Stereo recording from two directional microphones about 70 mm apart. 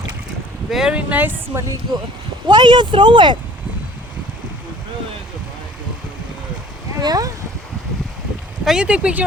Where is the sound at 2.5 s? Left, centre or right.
Right.